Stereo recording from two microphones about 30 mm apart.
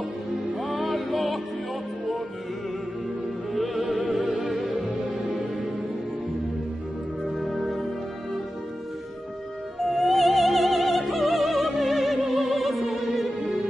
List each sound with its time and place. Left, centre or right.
0.6 s music: centre
3.5 s music: centre
7.2 s music: centre
9.8 s music: centre